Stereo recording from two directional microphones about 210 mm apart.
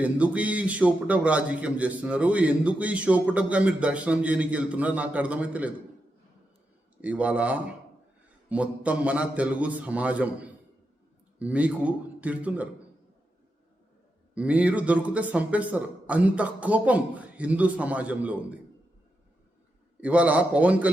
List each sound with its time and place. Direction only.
0.0 s a man's voice: 5° right (ahead or behind)
7.0 s a man's voice: 5° right (ahead or behind)
14.3 s a man's voice: 5° right (ahead or behind)
20.0 s a man's voice: 5° right (ahead or behind)